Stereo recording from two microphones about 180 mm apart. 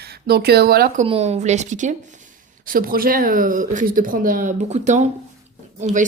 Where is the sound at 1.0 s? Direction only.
35° right (ahead or behind).